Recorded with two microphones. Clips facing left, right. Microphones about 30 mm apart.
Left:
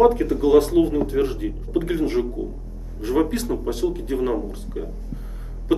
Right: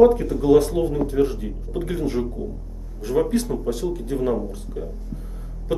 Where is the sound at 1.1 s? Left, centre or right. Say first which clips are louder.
Right 1 dB; left.